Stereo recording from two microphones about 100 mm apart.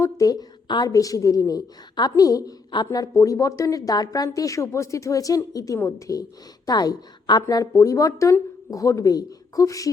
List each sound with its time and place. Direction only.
0.0 s a woman's voice: 35° left (ahead or behind)
6.7 s a woman's voice: 45° left (ahead or behind)
7.4 s a woman's voice: 35° left (ahead or behind)